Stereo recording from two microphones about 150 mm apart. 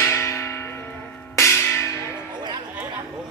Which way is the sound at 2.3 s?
30° right (ahead or behind).